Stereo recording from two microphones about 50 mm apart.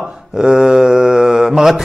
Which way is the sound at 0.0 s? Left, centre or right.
Centre.